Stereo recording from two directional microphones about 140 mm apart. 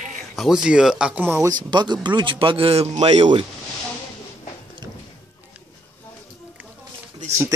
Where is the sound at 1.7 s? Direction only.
30° right (ahead or behind).